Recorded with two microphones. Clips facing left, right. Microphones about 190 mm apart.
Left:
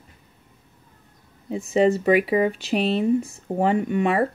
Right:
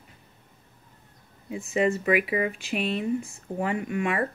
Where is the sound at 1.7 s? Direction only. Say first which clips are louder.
Left 6 dB; 35° left (ahead or behind).